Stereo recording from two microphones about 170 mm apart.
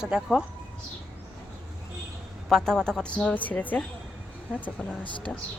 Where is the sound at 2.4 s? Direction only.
5° left (ahead or behind).